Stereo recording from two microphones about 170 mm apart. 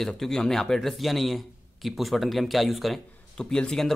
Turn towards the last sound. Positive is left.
turn(degrees=5)  # may be behind; listen again after turning